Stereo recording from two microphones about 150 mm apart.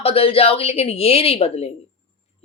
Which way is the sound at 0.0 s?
40° left (ahead or behind).